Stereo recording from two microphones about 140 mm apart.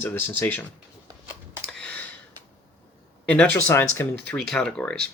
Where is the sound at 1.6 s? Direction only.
5° left (ahead or behind).